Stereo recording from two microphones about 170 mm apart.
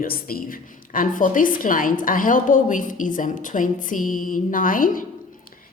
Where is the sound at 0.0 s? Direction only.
60° left (ahead or behind).